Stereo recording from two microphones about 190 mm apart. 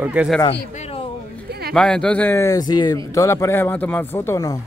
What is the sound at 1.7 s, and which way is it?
A man's voice, 5° left (ahead or behind).